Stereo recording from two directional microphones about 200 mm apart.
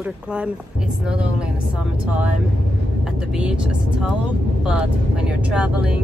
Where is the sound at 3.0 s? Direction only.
5° right (ahead or behind).